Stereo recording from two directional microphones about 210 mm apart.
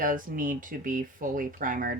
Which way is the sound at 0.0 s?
40° right (ahead or behind).